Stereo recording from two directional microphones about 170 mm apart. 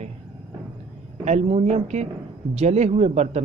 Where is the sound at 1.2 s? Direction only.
40° right (ahead or behind).